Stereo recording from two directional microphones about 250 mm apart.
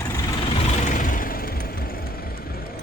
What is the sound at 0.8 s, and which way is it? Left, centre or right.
Vehicle, left.